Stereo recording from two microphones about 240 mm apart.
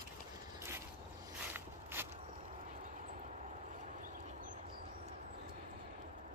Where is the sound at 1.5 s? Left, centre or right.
Centre.